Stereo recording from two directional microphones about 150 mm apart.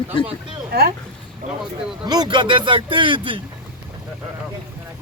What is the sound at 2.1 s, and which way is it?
Speech, 30° right (ahead or behind).